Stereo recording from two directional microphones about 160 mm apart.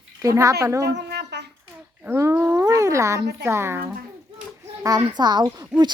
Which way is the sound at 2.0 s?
15° right (ahead or behind).